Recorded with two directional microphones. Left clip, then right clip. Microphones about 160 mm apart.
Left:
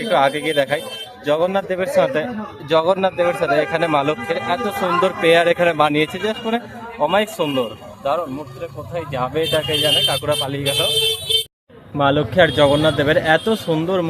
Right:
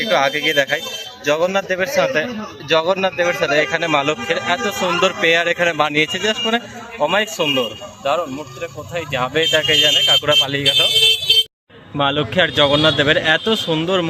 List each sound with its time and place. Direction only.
0.0 s speech: 10° left (ahead or behind)
1.2 s a man's voice: centre (ahead or behind)
9.4 s speech: 15° right (ahead or behind)
10.2 s speech: 5° right (ahead or behind)
11.9 s speech: 5° left (ahead or behind)